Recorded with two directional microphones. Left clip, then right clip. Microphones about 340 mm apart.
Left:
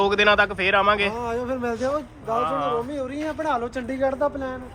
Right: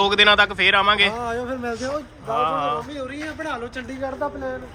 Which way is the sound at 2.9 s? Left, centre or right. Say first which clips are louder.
Left 2 dB; centre.